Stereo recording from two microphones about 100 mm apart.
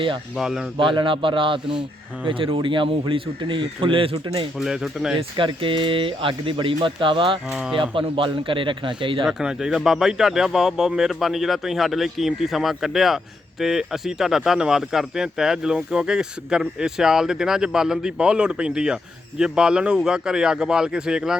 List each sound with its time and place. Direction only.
0.3 s speech: 5° right (ahead or behind)
0.8 s speech: 55° right (ahead or behind)
1.6 s speech: 5° right (ahead or behind)
2.2 s speech: 60° right (ahead or behind)
4.5 s speech: 5° right (ahead or behind)
5.4 s speech: 60° right (ahead or behind)
7.5 s speech: 5° right (ahead or behind)
7.8 s speech: 60° right (ahead or behind)
9.2 s speech: 5° right (ahead or behind)